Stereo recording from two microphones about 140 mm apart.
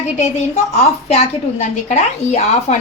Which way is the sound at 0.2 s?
55° left (ahead or behind).